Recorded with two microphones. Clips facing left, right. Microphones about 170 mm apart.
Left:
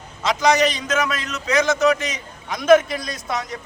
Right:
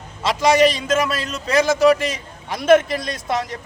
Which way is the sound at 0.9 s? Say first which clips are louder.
Right 3 dB; 30° right (ahead or behind).